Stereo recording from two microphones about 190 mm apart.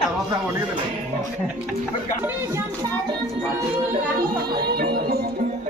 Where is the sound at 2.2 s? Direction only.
15° right (ahead or behind).